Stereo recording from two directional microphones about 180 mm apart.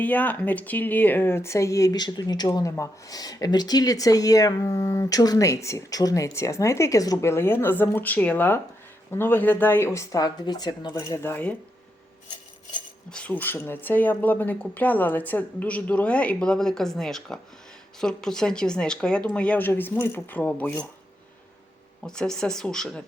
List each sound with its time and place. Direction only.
0.0 s speech: 10° left (ahead or behind)
13.1 s speech: 5° left (ahead or behind)
22.0 s speech: 5° left (ahead or behind)